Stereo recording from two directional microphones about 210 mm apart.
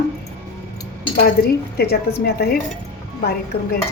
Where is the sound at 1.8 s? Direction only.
50° left (ahead or behind).